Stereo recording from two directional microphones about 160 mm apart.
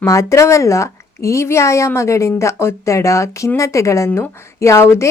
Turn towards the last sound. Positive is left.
turn(degrees=15)  # may be behind; listen again after turning